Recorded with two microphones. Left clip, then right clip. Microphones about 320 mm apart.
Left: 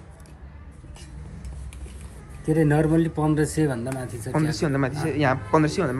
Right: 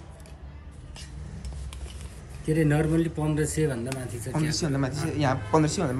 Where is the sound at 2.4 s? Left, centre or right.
Centre.